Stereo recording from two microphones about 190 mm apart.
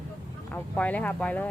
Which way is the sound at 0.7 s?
5° left (ahead or behind).